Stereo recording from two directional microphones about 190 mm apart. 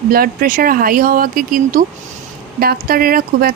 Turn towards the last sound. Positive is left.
turn(degrees=-50)  # may be behind; listen again after turning